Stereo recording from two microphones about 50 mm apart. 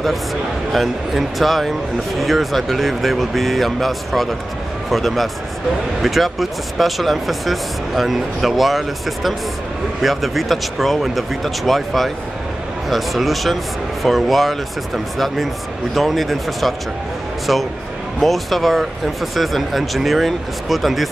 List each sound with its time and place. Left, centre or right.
0.7 s speech: centre